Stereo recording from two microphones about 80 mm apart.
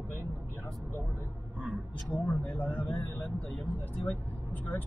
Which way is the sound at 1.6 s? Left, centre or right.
Centre.